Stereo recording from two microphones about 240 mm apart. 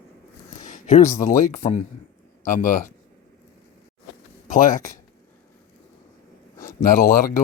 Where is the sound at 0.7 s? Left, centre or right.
Left.